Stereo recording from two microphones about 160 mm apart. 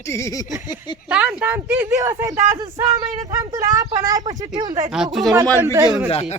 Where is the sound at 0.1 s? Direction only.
20° left (ahead or behind).